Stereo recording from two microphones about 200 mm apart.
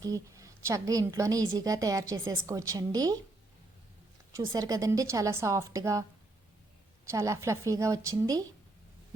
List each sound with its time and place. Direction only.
0.0 s a woman's voice: 15° right (ahead or behind)
4.4 s a woman's voice: 15° right (ahead or behind)
7.1 s a woman's voice: 15° right (ahead or behind)